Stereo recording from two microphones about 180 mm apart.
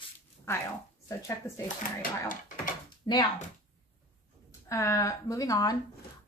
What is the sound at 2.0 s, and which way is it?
Speech, 50° left (ahead or behind).